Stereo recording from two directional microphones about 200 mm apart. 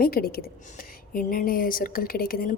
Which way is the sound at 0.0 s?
50° left (ahead or behind).